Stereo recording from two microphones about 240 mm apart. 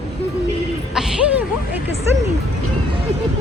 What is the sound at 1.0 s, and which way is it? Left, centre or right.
Speech, centre.